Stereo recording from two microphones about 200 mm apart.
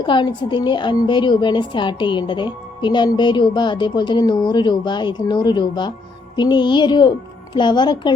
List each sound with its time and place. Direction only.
0.0 s a woman's voice: 25° left (ahead or behind)